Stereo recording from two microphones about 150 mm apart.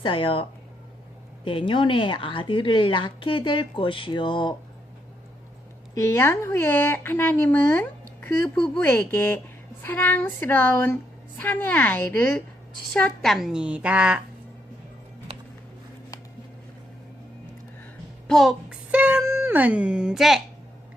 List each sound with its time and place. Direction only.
0.0 s a woman's voice: 35° left (ahead or behind)
1.5 s a woman's voice: 35° left (ahead or behind)
5.9 s a woman's voice: 15° left (ahead or behind); by 14.2 s 5° right (ahead or behind)
15.3 s music: 45° right (ahead or behind)
18.3 s a child's voice: centre (ahead or behind)
18.9 s female singing: 10° right (ahead or behind)
19.2 s speech: 15° right (ahead or behind); by 20.4 s centre (ahead or behind)